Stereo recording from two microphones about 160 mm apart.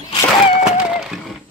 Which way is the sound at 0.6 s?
5° right (ahead or behind).